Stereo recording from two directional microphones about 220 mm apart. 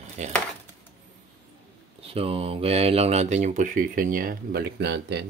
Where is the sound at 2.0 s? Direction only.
25° right (ahead or behind); by 5.3 s 50° right (ahead or behind).